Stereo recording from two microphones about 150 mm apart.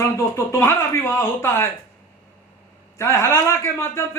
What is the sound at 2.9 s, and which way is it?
Speech, 15° left (ahead or behind).